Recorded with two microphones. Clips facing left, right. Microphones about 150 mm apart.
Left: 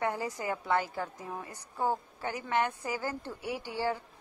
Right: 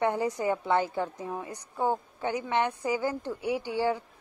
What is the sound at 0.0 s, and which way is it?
A woman's voice, 20° right (ahead or behind).